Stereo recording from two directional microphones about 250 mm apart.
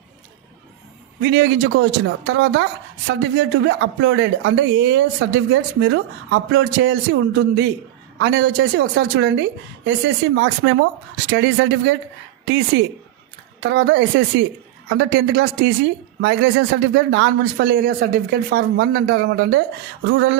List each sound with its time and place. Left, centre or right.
1.2 s a man's voice: right